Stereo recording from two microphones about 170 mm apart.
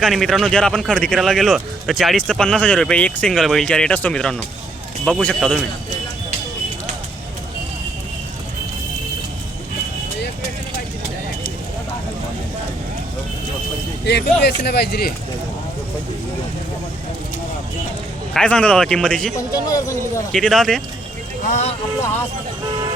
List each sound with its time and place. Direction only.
0.0 s speech: centre (ahead or behind)
14.0 s speech: 80° left
18.3 s speech: 5° left (ahead or behind)
19.5 s speech: 20° left (ahead or behind)
20.3 s speech: 5° left (ahead or behind)
21.4 s speech: 40° left (ahead or behind)